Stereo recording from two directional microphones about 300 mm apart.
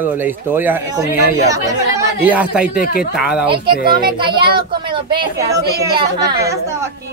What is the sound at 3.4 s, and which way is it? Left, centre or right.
Speech, centre.